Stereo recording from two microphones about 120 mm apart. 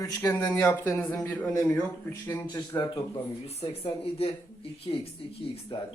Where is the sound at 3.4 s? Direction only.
60° left (ahead or behind).